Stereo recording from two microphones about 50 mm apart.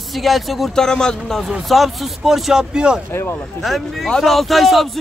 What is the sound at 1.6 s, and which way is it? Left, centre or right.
Speech, centre.